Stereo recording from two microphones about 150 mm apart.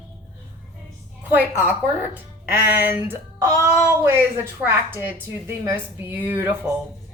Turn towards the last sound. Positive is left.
turn(degrees=-15)  # may be behind; listen again after turning